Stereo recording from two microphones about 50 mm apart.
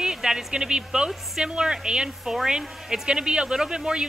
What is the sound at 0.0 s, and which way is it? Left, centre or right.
Speech, centre.